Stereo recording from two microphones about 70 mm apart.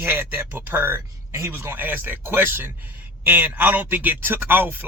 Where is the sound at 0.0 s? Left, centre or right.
Right.